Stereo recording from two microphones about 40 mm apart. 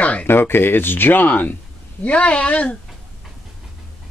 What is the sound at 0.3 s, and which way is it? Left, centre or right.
Speech, left.